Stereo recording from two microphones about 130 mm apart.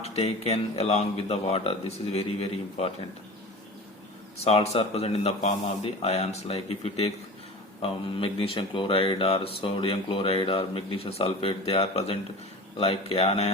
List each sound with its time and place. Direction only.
0.0 s speech: 55° left (ahead or behind)
4.4 s speech: 50° left (ahead or behind)